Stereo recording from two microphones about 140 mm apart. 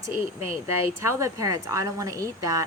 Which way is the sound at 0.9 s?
20° right (ahead or behind).